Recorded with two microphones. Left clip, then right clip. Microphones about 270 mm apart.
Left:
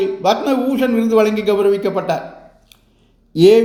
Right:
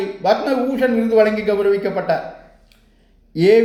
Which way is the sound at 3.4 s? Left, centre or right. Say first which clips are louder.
Left 3 dB; left.